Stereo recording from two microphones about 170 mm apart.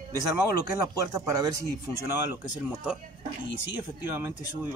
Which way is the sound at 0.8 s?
20° right (ahead or behind).